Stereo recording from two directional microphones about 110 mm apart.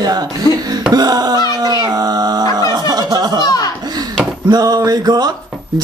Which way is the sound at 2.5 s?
40° right (ahead or behind).